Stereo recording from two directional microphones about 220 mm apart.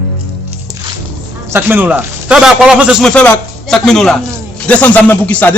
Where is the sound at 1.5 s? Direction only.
10° right (ahead or behind).